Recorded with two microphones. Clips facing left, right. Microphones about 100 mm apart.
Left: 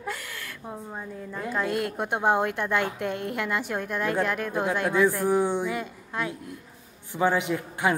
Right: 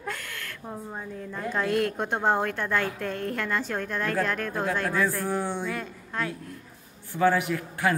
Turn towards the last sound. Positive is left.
turn(degrees=20)  # may be behind; listen again after turning